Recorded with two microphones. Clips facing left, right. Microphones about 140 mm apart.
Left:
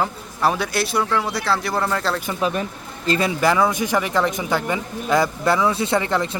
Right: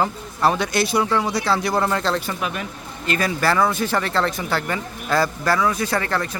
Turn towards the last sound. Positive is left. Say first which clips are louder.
# left 3 dB
turn(degrees=20)  # may be behind; listen again after turning